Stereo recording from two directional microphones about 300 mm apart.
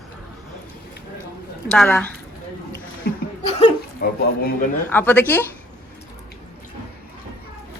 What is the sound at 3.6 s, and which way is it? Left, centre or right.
Speech, left.